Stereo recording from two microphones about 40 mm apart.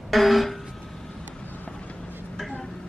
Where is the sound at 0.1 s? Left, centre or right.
Centre.